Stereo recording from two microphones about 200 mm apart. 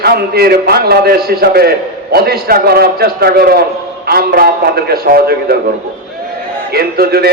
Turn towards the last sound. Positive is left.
turn(degrees=-50)  # may be behind; listen again after turning